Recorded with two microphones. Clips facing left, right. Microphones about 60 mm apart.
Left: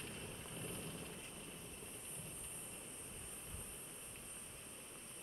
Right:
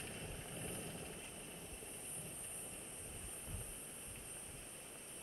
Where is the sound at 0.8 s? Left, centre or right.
Centre.